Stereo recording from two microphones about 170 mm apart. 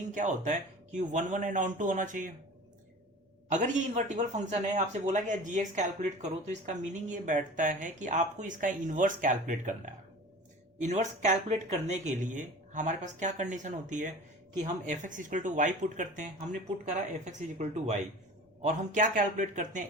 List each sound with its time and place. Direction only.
0.1 s speech: 45° right (ahead or behind)
3.5 s speech: 45° right (ahead or behind)